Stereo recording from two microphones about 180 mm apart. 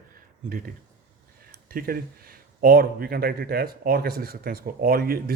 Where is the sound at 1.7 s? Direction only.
55° right (ahead or behind).